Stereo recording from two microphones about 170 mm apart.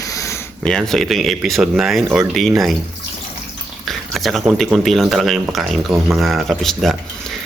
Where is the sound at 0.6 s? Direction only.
5° left (ahead or behind).